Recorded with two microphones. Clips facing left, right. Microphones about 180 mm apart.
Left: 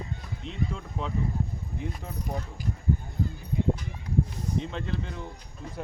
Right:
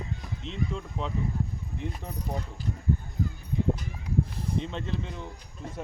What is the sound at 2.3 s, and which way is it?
Speech, 15° left (ahead or behind).